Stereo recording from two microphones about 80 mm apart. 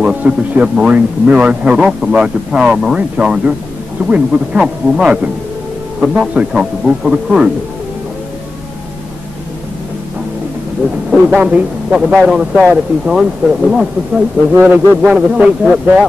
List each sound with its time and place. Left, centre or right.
0.0 s a man's voice: centre
11.3 s a man's voice: centre
14.5 s a man's voice: right